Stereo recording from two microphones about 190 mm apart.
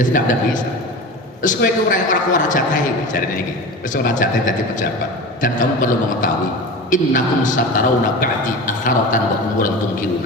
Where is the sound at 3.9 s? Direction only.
45° left (ahead or behind).